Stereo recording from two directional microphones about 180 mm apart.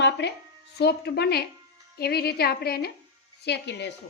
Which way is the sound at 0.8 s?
65° left (ahead or behind).